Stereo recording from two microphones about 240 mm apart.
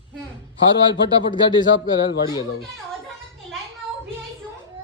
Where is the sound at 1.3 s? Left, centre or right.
Centre.